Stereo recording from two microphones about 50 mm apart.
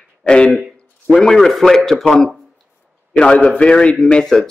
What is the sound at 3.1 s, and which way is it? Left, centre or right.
Speech, left.